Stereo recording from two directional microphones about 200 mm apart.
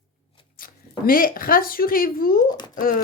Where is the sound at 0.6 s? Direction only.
45° left (ahead or behind).